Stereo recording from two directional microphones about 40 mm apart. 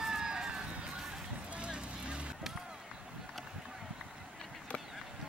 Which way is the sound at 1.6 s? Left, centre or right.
Right.